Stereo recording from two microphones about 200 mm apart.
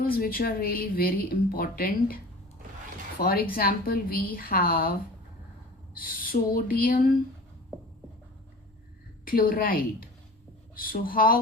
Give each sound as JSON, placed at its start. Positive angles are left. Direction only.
{"t": 0.0, "sound": "speech", "side_deg": 45}
{"t": 3.2, "sound": "speech", "side_deg": 50}
{"t": 6.0, "sound": "speech", "side_deg": 45}
{"t": 9.2, "sound": "speech", "side_deg": 45}